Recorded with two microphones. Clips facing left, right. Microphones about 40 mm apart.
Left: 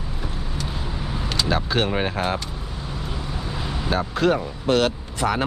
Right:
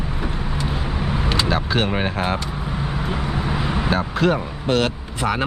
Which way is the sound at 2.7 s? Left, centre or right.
Right.